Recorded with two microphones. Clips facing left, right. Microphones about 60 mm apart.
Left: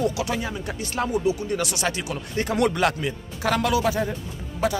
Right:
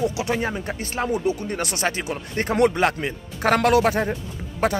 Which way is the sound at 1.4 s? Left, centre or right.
Right.